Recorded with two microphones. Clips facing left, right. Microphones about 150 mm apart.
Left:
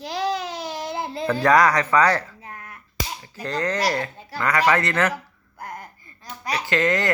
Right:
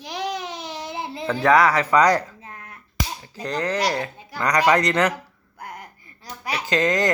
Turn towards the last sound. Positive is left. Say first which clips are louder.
# right 1 dB
turn(degrees=-15)  # may be behind; listen again after turning